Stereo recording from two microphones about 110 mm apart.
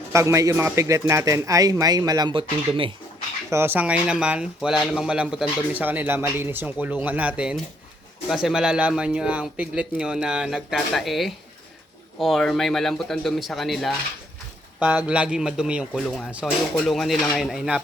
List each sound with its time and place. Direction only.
0.1 s a man's voice: 25° right (ahead or behind)
2.3 s speech: 50° right (ahead or behind)
3.5 s a man's voice: 20° right (ahead or behind); by 13.9 s centre (ahead or behind)
14.8 s a man's voice: 15° right (ahead or behind)